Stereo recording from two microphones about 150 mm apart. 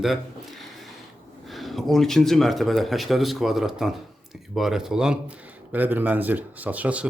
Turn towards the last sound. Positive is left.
turn(degrees=-10)  # may be behind; listen again after turning